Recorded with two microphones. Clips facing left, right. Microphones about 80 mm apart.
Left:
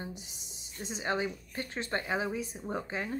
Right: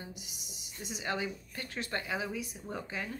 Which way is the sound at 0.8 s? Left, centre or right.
Left.